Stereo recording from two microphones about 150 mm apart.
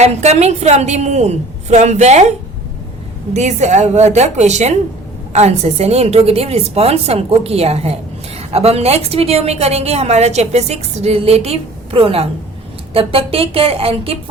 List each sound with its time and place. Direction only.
0.0 s a woman's voice: 45° right (ahead or behind)
3.3 s a woman's voice: 50° right (ahead or behind)